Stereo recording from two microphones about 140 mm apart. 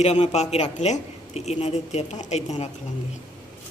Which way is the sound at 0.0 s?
50° left (ahead or behind).